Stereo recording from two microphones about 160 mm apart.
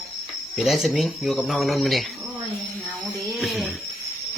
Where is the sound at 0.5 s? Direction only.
5° right (ahead or behind).